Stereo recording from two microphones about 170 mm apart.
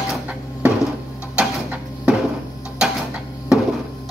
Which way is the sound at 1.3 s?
5° right (ahead or behind).